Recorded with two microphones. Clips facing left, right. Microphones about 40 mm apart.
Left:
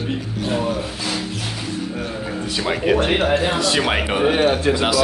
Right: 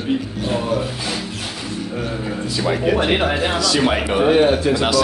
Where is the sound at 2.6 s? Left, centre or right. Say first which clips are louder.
Even; left.